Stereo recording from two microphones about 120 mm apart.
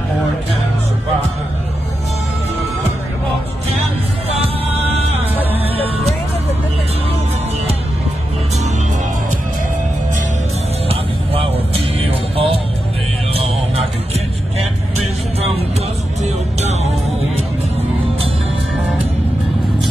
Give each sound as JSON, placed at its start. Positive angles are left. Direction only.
{"t": 4.3, "sound": "music", "side_deg": -55}
{"t": 10.9, "sound": "music", "side_deg": -55}